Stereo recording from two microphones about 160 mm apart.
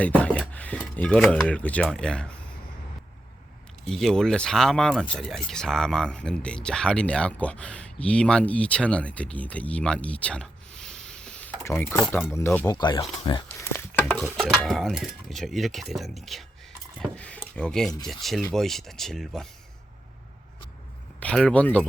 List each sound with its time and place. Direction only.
0.0 s a sound: 10° left (ahead or behind)
0.9 s speech: 5° left (ahead or behind)
3.8 s speech: 5° left (ahead or behind)
12.6 s speech: 25° left (ahead or behind)
13.6 s a sound: 15° left (ahead or behind)
14.0 s stir: 5° left (ahead or behind)
14.3 s speech: centre (ahead or behind)
21.2 s speech: 5° left (ahead or behind)